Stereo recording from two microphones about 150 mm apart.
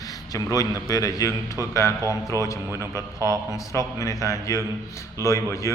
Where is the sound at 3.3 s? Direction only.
20° left (ahead or behind).